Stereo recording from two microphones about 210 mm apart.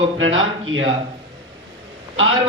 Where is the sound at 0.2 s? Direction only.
65° right (ahead or behind).